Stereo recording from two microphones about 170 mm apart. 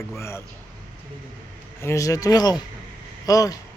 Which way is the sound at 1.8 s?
20° left (ahead or behind).